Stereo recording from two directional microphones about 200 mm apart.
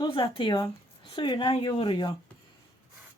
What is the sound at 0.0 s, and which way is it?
Speech, 25° left (ahead or behind).